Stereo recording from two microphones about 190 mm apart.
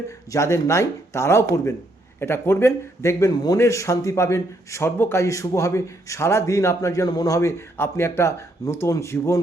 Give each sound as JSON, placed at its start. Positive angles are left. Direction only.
{"t": 0.3, "sound": "a man's voice", "side_deg": 15}